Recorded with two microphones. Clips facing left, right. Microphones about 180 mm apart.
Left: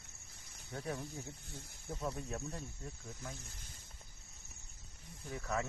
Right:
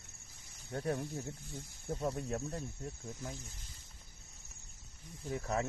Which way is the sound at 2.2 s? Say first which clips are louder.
Right 4 dB; 65° right (ahead or behind).